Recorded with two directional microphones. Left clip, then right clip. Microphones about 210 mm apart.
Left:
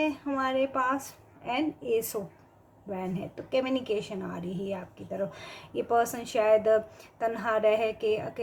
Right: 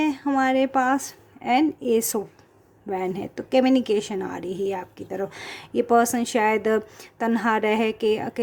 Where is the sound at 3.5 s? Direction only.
50° right (ahead or behind).